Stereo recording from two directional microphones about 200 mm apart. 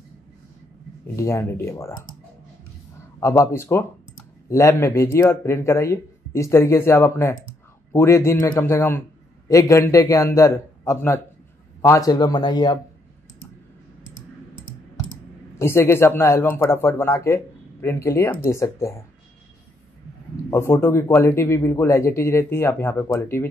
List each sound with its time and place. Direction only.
1.1 s speech: 15° left (ahead or behind)
3.2 s a man's voice: 15° left (ahead or behind)
15.6 s speech: 10° left (ahead or behind)
20.4 s speech: 15° left (ahead or behind)